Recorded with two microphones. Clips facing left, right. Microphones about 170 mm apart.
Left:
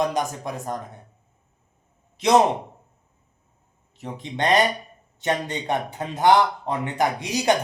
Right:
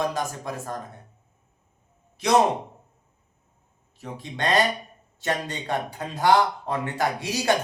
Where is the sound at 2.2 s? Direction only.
20° left (ahead or behind).